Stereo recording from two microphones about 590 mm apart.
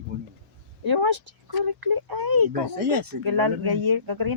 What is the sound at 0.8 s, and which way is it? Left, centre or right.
Speech, right.